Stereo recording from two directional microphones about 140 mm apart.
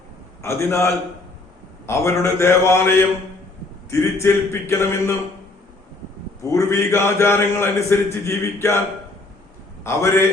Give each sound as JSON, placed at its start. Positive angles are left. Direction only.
{"t": 0.4, "sound": "a man's voice", "side_deg": 20}
{"t": 6.5, "sound": "a man's voice", "side_deg": 20}
{"t": 9.8, "sound": "a man's voice", "side_deg": 20}